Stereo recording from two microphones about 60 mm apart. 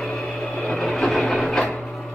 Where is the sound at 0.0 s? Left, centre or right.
Centre.